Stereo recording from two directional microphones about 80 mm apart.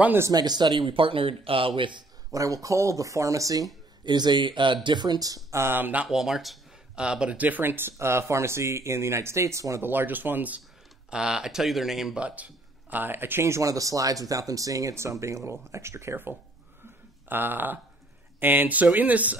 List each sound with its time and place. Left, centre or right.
0.3 s a man's voice: right
2.3 s speech: right
4.0 s speech: right
4.8 s speech: right
5.5 s speech: right
6.0 s speech: centre; by 9.8 s right
9.8 s speech: right
11.1 s speech: centre
12.9 s speech: right